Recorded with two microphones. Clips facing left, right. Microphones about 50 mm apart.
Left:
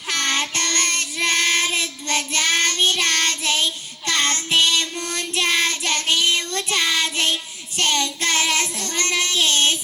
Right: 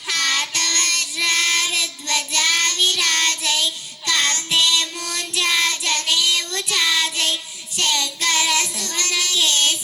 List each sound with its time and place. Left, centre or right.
0.1 s child singing: left